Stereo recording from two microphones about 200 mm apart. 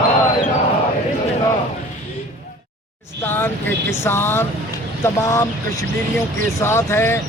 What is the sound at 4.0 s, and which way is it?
Speech, 10° left (ahead or behind).